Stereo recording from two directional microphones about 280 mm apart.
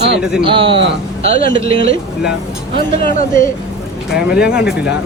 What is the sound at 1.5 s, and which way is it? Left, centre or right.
Speech, centre.